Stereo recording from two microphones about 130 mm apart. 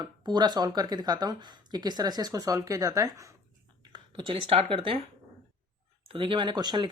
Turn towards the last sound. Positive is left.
turn(degrees=-35)  # may be behind; listen again after turning